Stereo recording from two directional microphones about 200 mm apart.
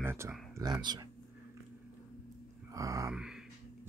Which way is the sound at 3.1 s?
5° right (ahead or behind).